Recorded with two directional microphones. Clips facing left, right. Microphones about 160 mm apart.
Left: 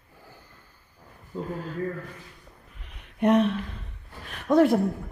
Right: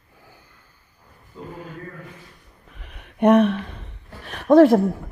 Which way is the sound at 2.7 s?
60° right (ahead or behind).